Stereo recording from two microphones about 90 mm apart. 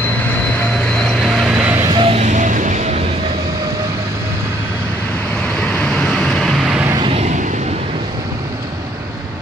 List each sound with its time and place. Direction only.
0.9 s vehicle: 5° left (ahead or behind)
1.5 s music: 15° right (ahead or behind)
1.9 s music: 70° right (ahead or behind)
5.6 s vehicle: 10° left (ahead or behind)